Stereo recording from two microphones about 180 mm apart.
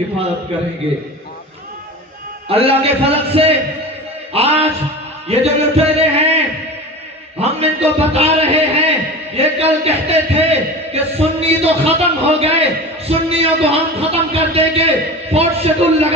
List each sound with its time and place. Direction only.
2.4 s a man's voice: 30° right (ahead or behind)